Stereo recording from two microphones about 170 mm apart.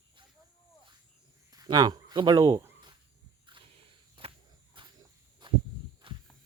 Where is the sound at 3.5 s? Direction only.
25° right (ahead or behind).